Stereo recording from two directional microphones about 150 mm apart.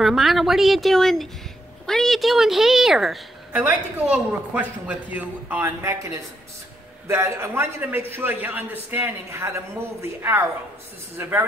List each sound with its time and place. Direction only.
0.0 s a woman's voice: centre (ahead or behind)